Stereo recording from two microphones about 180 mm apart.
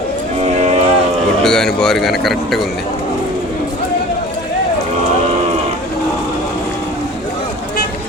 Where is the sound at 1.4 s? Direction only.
5° left (ahead or behind).